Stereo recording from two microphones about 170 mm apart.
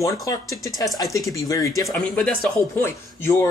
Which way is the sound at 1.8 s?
5° left (ahead or behind).